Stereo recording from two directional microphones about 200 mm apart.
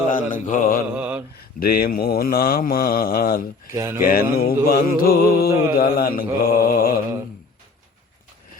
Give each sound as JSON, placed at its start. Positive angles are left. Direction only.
{"t": 0.1, "sound": "mantra", "side_deg": 40}
{"t": 0.9, "sound": "mantra", "side_deg": -10}
{"t": 1.5, "sound": "mantra", "side_deg": 50}
{"t": 3.7, "sound": "speech", "side_deg": -15}
{"t": 4.0, "sound": "mantra", "side_deg": 45}